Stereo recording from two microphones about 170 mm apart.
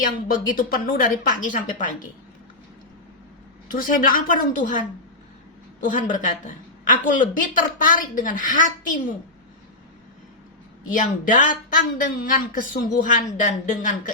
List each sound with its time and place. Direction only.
0.0 s a woman's voice: 55° left (ahead or behind)
3.7 s a woman's voice: 50° left (ahead or behind)
5.8 s a woman's voice: 50° left (ahead or behind)
10.8 s a woman's voice: 50° left (ahead or behind)